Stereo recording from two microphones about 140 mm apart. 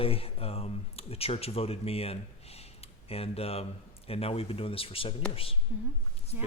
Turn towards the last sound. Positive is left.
turn(degrees=-15)  # may be behind; listen again after turning